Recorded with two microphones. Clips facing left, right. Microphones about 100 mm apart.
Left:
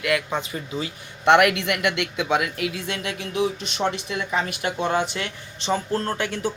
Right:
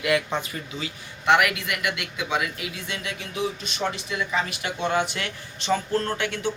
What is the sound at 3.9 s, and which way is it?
Speech, 55° left (ahead or behind).